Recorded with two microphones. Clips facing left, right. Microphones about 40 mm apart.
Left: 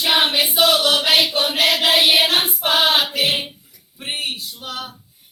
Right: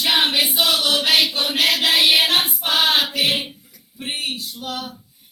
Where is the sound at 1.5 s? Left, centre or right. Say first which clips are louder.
Left 1 dB; left.